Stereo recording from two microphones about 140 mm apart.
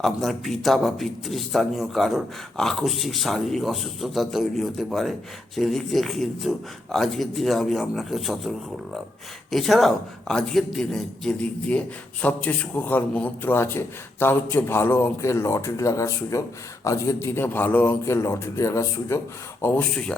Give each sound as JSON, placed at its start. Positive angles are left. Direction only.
{"t": 0.0, "sound": "a man's voice", "side_deg": 0}